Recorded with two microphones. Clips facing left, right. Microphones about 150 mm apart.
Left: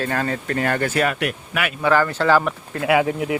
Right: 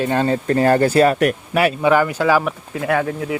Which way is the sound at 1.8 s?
15° right (ahead or behind).